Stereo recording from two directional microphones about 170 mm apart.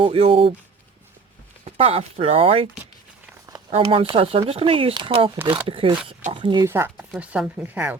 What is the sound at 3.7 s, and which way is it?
Speech, 30° right (ahead or behind).